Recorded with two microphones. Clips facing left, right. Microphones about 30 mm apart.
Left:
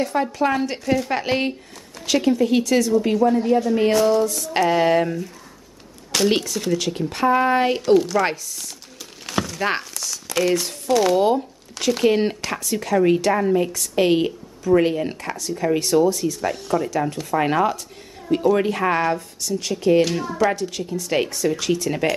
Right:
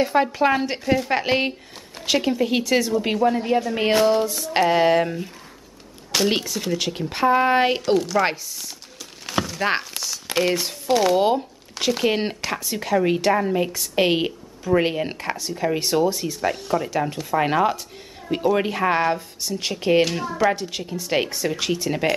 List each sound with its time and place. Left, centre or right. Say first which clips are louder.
0.0 s a woman's voice: right 2 dB; right
6.1 s speech: left 2 dB; centre
7.8 s speech: left 4 dB; centre
9.2 s a sound: even; centre
9.9 s crumpling: even; right
11.1 s a woman's voice: left 1 dB; centre
20.1 s speech: left 1 dB; centre
20.7 s speech: left 1 dB; right